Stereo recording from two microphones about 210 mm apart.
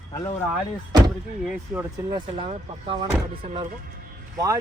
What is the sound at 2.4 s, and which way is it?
Speech, 25° right (ahead or behind).